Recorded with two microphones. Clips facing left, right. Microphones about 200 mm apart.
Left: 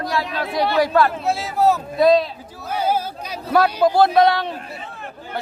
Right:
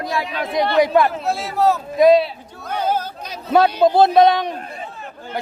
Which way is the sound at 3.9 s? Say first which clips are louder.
Right 2 dB; 20° right (ahead or behind).